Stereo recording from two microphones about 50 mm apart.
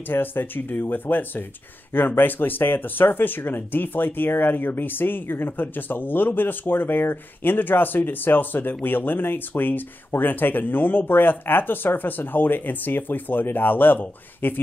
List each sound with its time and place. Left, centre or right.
0.1 s speech: left